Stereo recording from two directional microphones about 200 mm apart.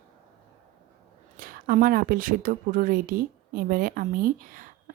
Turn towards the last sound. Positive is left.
turn(degrees=-40)  # may be behind; listen again after turning